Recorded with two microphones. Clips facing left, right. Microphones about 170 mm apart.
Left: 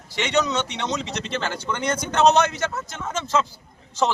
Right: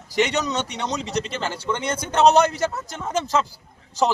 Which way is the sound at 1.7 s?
30° right (ahead or behind).